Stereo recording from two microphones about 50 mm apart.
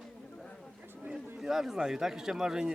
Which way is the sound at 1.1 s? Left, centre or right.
Centre.